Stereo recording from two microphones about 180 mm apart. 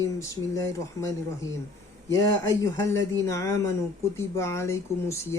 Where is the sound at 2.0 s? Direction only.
15° left (ahead or behind).